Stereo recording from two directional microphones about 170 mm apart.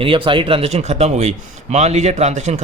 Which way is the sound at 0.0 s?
30° right (ahead or behind).